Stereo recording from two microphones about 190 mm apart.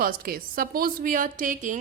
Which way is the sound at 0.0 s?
50° right (ahead or behind).